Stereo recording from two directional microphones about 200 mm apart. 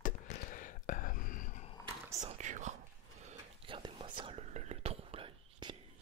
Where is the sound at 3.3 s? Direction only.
25° right (ahead or behind).